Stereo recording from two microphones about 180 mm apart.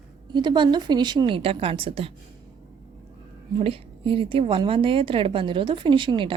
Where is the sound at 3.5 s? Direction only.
35° right (ahead or behind).